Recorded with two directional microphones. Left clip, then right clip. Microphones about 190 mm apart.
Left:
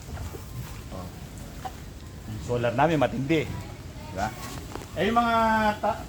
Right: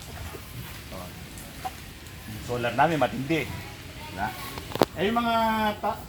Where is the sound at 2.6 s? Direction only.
30° left (ahead or behind).